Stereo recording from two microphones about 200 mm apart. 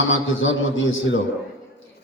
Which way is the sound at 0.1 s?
70° left (ahead or behind).